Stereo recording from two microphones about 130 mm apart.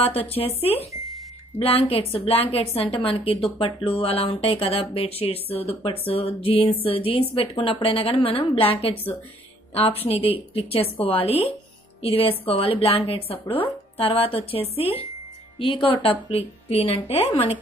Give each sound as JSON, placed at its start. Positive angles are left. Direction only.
{"t": 0.0, "sound": "speech", "side_deg": 50}